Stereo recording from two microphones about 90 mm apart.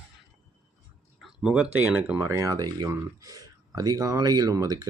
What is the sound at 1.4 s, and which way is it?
Speech, 15° right (ahead or behind).